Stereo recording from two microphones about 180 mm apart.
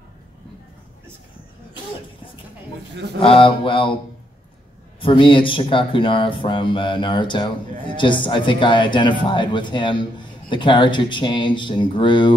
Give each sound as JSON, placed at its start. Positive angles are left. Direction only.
{"t": 3.2, "sound": "speech", "side_deg": 30}
{"t": 5.0, "sound": "speech", "side_deg": 30}